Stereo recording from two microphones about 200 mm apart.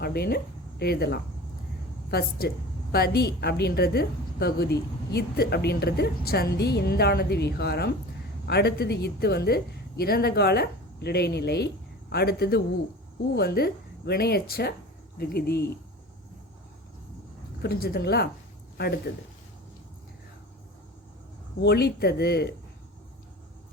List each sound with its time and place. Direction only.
0.0 s a woman's voice: 55° left (ahead or behind)
17.6 s a woman's voice: 50° left (ahead or behind)
21.6 s a woman's voice: 55° left (ahead or behind)